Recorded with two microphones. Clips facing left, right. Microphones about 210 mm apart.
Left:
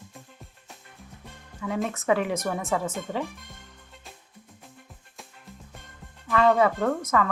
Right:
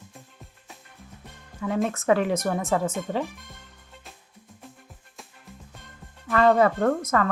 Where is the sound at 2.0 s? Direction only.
40° right (ahead or behind).